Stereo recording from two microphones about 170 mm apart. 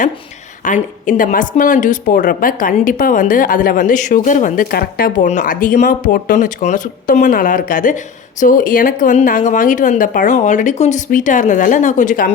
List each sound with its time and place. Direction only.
0.6 s speech: 50° left (ahead or behind)
5.3 s speech: 50° left (ahead or behind)